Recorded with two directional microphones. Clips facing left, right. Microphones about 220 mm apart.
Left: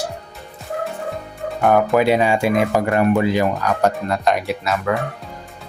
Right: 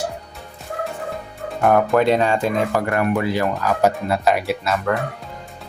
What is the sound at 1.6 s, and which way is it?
Speech, centre (ahead or behind).